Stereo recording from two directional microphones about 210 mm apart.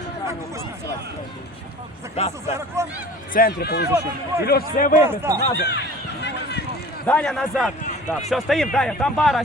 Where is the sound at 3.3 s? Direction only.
45° left (ahead or behind).